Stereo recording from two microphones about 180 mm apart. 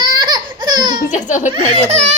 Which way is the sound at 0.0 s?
25° right (ahead or behind).